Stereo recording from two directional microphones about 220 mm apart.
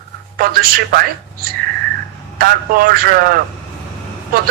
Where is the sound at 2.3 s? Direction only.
40° right (ahead or behind).